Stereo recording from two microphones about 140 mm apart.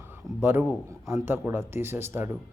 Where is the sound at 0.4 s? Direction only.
15° right (ahead or behind).